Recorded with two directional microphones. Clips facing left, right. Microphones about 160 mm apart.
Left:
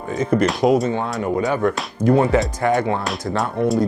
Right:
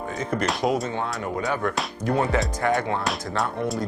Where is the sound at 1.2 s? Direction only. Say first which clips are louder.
Left 8 dB; 20° left (ahead or behind).